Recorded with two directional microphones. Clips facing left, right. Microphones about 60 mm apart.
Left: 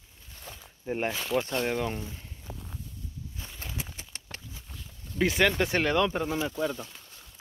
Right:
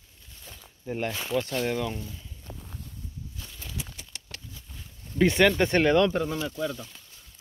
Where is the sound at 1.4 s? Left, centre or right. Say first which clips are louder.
Right 2 dB; left.